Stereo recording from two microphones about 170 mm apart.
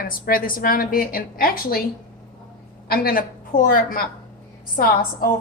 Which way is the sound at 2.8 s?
60° left (ahead or behind).